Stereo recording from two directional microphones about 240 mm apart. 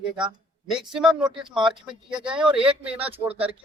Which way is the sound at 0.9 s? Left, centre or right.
Centre.